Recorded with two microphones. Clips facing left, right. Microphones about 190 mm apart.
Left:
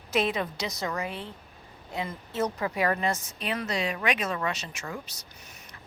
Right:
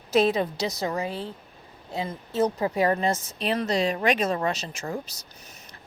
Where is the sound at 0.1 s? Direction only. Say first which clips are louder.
Right 6 dB; 35° right (ahead or behind).